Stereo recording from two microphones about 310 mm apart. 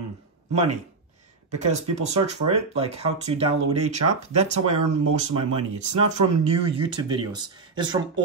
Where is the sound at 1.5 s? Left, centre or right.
Right.